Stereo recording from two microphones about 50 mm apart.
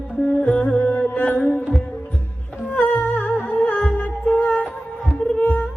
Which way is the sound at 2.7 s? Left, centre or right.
Left.